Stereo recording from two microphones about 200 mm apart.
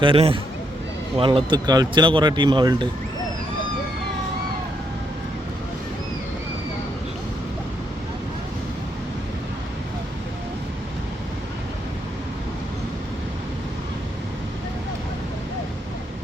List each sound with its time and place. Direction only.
0.0 s speech: 25° right (ahead or behind)